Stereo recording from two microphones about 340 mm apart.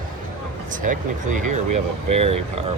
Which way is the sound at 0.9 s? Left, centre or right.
Right.